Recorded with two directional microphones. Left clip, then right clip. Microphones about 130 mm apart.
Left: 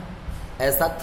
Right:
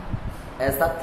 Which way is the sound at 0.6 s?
75° left (ahead or behind).